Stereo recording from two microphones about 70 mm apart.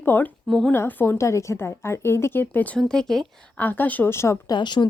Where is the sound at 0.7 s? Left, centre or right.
Left.